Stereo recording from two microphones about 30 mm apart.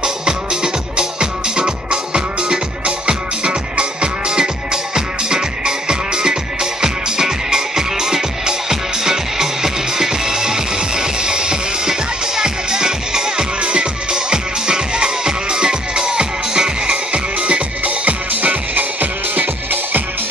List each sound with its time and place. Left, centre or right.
0.0 s music: right
4.9 s music: right
13.6 s music: right
14.1 s music: right